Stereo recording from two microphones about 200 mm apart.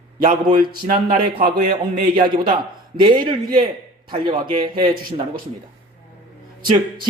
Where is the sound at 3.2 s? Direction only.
45° right (ahead or behind).